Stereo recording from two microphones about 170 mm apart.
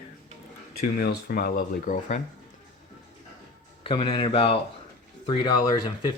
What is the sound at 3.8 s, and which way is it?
Speech, 30° left (ahead or behind).